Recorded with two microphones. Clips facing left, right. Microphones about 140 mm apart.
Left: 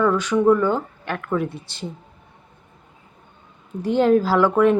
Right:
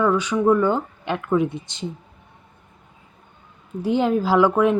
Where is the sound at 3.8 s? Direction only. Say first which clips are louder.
Left 3 dB; 10° right (ahead or behind).